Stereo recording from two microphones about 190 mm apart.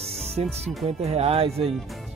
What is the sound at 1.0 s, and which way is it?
Speech, 35° right (ahead or behind).